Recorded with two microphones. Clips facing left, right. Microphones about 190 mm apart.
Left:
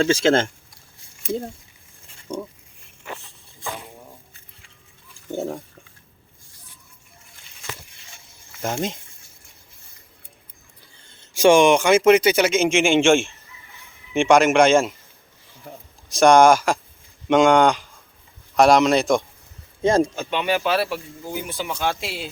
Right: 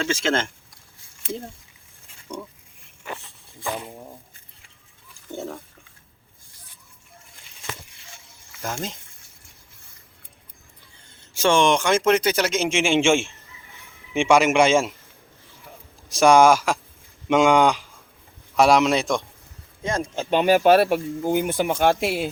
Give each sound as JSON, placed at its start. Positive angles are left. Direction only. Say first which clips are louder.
{"t": 0.0, "sound": "speech", "louder": "left 6 dB", "side_deg": 35}
{"t": 5.4, "sound": "speech", "louder": "left 5 dB", "side_deg": 35}
{"t": 11.3, "sound": "a man's voice", "louder": "left 5 dB", "side_deg": 10}
{"t": 16.0, "sound": "a man's voice", "louder": "left 2 dB", "side_deg": -5}
{"t": 19.8, "sound": "speech", "louder": "left 9 dB", "side_deg": 30}
{"t": 20.3, "sound": "speech", "louder": "right 7 dB", "side_deg": -40}